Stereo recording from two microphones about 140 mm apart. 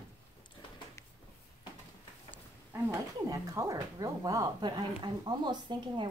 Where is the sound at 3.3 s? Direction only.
25° right (ahead or behind).